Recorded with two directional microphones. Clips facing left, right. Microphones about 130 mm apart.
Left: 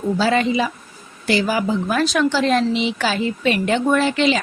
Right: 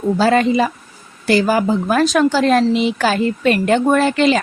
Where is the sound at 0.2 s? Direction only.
45° right (ahead or behind).